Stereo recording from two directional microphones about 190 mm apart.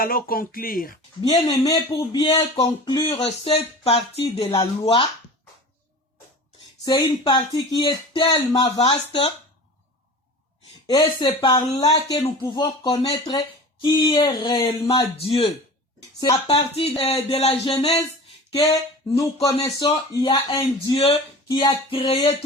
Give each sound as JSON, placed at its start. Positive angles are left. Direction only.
{"t": 0.0, "sound": "speech", "side_deg": 50}
{"t": 1.3, "sound": "speech", "side_deg": 20}
{"t": 6.8, "sound": "speech", "side_deg": 25}
{"t": 10.8, "sound": "speech", "side_deg": 25}
{"t": 19.6, "sound": "speech", "side_deg": 25}